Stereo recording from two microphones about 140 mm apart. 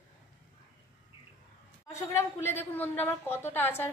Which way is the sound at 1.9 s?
20° left (ahead or behind).